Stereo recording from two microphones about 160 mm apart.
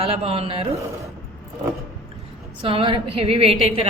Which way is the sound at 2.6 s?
35° right (ahead or behind).